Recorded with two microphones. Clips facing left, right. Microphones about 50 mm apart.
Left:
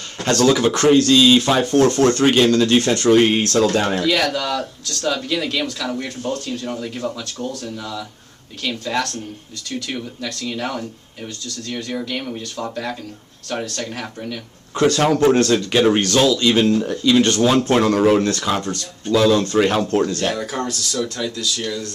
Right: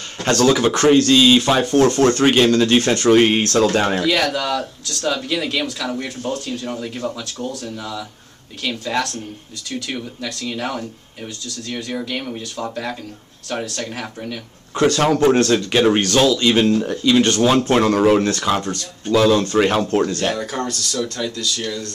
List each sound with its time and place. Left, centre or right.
0.2 s speech: right
1.4 s speech: centre
1.9 s speech: right
4.0 s speech: centre
20.3 s speech: centre